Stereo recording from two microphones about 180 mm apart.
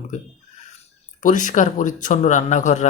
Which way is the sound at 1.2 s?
45° left (ahead or behind).